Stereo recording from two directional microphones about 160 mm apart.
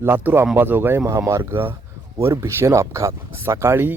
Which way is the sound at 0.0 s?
15° right (ahead or behind).